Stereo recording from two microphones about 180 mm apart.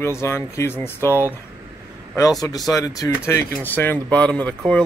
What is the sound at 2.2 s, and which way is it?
A man's voice, 20° left (ahead or behind).